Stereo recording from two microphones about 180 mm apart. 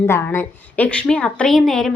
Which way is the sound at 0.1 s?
15° left (ahead or behind).